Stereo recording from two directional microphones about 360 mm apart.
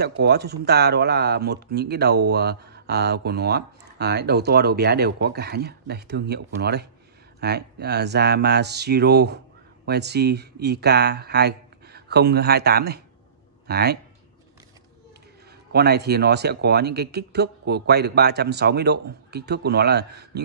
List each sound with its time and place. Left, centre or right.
0.0 s speech: right
15.7 s speech: right